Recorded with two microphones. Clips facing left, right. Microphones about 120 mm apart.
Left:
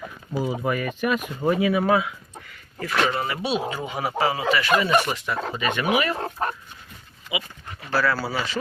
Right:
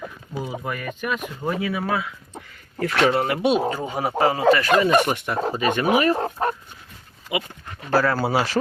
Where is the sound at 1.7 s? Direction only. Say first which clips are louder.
Left 4 dB; 20° left (ahead or behind).